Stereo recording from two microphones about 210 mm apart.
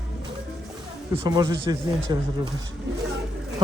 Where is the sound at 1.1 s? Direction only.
20° right (ahead or behind).